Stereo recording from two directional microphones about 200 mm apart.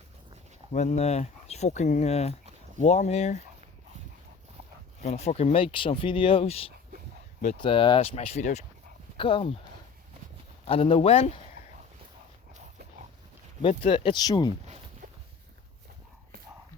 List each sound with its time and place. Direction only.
0.7 s speech: 35° left (ahead or behind)
5.0 s speech: 35° left (ahead or behind)
10.7 s speech: 30° left (ahead or behind)
13.6 s speech: 25° left (ahead or behind)